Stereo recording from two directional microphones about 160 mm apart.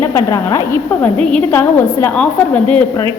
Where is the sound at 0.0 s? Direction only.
20° left (ahead or behind).